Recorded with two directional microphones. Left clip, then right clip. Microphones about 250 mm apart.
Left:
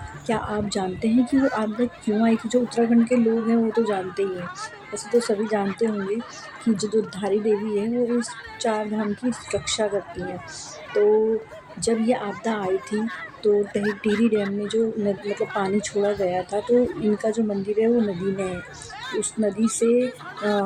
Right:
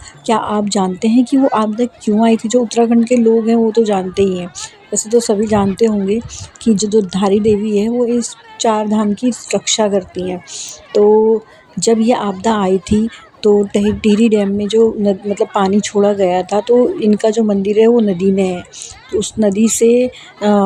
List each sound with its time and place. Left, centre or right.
0.3 s a woman's voice: right